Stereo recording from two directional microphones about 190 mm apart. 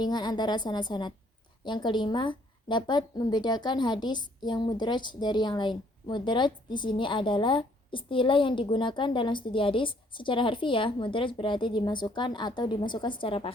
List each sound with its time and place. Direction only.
0.0 s a woman's voice: 20° left (ahead or behind)